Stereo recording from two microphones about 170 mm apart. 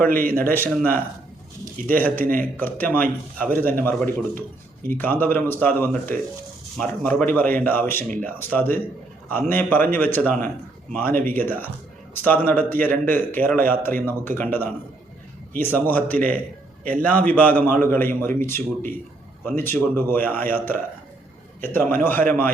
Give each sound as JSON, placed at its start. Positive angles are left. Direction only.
{"t": 0.1, "sound": "a man's voice", "side_deg": -60}
{"t": 0.3, "sound": "a man's voice", "side_deg": 10}